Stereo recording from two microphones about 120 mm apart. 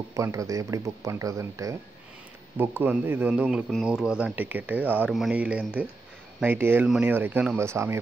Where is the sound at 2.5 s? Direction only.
15° right (ahead or behind).